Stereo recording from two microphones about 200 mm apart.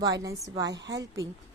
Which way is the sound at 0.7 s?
60° right (ahead or behind).